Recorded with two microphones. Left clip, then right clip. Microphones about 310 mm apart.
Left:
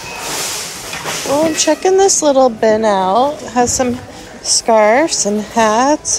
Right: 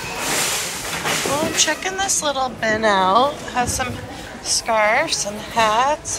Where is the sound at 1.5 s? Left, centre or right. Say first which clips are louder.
Left 8 dB; centre.